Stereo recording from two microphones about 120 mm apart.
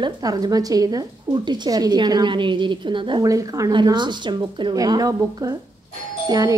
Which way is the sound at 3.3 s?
30° right (ahead or behind).